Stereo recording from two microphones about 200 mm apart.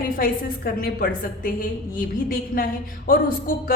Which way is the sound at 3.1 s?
45° left (ahead or behind).